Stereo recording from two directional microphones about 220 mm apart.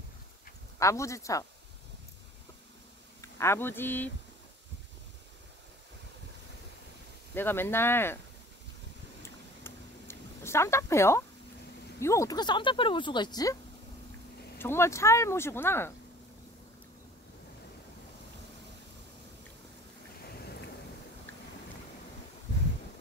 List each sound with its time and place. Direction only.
0.7 s speech: 15° left (ahead or behind)
3.2 s speech: 10° left (ahead or behind)
7.3 s speech: 10° left (ahead or behind)
9.2 s a sound: 10° left (ahead or behind)
12.0 s speech: 15° left (ahead or behind)
14.6 s speech: 10° left (ahead or behind)